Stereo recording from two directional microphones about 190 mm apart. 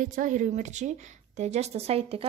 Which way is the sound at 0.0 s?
45° right (ahead or behind).